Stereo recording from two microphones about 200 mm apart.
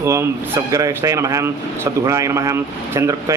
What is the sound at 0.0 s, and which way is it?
Speech, 15° right (ahead or behind).